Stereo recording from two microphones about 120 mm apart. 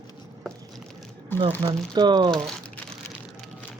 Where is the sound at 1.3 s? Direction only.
20° left (ahead or behind).